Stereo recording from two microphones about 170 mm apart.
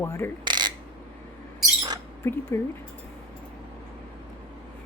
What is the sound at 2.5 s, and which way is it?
Speech, 15° left (ahead or behind).